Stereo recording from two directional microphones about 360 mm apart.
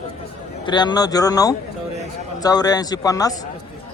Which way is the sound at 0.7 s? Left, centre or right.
Centre.